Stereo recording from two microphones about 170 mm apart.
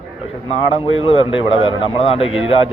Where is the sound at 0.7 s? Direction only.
35° left (ahead or behind).